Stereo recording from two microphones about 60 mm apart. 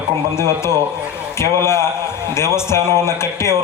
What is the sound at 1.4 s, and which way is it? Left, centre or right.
Speech, left.